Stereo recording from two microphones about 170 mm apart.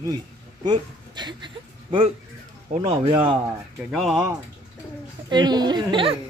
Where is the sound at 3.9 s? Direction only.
Centre (ahead or behind).